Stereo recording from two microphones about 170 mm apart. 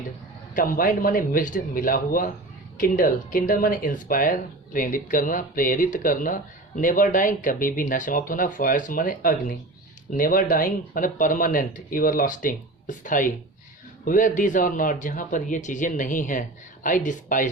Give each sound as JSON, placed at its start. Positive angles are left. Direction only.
{"t": 0.5, "sound": "a man's voice", "side_deg": 55}